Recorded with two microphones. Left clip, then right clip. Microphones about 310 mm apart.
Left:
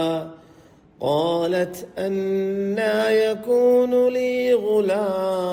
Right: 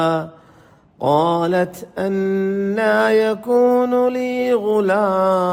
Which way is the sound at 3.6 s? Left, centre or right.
Right.